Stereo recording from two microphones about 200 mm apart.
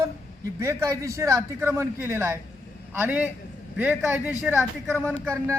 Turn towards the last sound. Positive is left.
turn(degrees=-15)  # may be behind; listen again after turning